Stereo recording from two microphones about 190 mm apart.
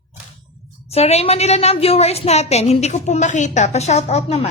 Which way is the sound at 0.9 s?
35° left (ahead or behind).